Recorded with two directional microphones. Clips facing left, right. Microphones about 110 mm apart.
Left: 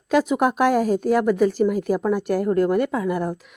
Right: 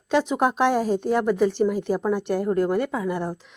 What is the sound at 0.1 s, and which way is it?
A woman's voice, 5° left (ahead or behind).